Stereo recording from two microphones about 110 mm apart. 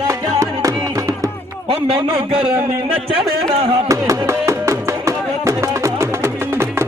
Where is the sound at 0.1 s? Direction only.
30° right (ahead or behind).